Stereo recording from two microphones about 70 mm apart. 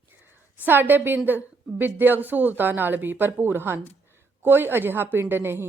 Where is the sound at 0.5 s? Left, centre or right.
Right.